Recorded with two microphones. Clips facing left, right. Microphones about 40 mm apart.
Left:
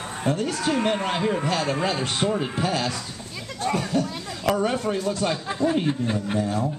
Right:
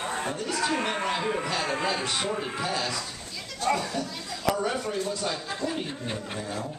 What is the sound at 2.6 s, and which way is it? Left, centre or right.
Speech, left.